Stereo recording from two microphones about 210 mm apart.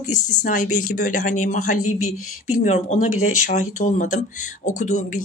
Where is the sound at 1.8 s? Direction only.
90° left.